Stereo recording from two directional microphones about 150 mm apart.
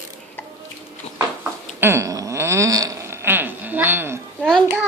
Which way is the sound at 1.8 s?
15° right (ahead or behind).